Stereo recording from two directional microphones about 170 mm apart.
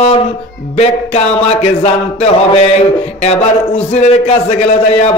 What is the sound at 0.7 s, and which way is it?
A man's voice, 40° left (ahead or behind).